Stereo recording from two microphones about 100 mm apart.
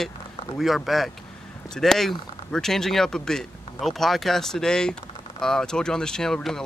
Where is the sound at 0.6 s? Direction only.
Centre (ahead or behind).